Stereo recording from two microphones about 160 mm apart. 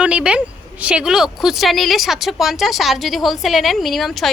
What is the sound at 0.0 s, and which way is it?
A woman's voice, 5° right (ahead or behind).